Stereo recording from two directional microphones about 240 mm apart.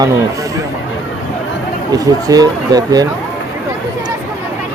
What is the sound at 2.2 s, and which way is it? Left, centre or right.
Speech, centre.